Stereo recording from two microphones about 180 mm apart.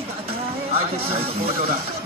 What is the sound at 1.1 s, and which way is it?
Speech, 30° right (ahead or behind).